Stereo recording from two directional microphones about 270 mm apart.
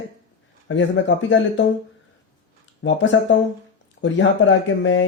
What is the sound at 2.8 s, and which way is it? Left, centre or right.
A man's voice, left.